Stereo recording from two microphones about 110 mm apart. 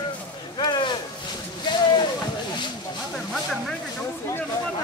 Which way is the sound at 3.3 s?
Centre (ahead or behind).